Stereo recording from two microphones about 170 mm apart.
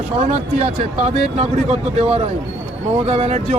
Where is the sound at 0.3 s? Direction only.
40° right (ahead or behind).